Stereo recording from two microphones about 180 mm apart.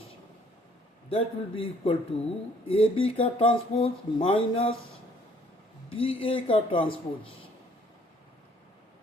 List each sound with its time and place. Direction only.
1.1 s speech: 30° left (ahead or behind)
5.9 s speech: 30° left (ahead or behind)